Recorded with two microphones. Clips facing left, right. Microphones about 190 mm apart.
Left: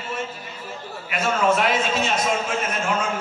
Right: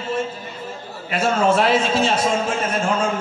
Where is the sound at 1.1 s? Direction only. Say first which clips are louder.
Right 3 dB; 30° right (ahead or behind).